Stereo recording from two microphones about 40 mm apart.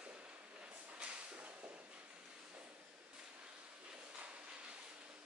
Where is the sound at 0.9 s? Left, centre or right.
Right.